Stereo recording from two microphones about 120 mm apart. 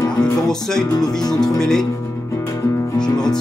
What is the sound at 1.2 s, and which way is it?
Speech, 35° left (ahead or behind).